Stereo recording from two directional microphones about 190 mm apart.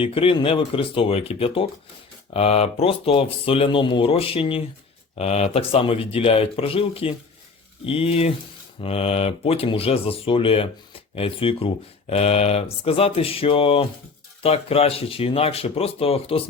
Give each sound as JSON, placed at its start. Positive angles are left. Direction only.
{"t": 0.0, "sound": "speech", "side_deg": 30}